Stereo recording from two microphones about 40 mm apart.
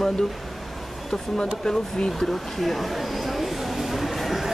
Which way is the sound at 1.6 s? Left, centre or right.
Centre.